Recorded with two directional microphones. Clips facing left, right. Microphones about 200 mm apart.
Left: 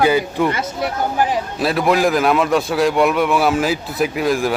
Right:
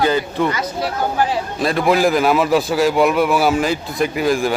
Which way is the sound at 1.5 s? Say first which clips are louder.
Right 1 dB; 5° left (ahead or behind).